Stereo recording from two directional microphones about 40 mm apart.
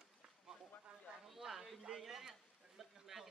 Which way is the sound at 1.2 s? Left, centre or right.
Centre.